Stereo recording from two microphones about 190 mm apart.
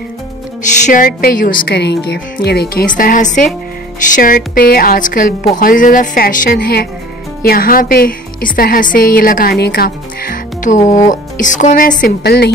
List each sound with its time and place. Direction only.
0.6 s a woman's voice: 40° left (ahead or behind); by 12.4 s 60° left (ahead or behind)